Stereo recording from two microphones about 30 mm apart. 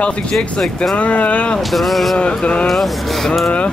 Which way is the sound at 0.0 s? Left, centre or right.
Left.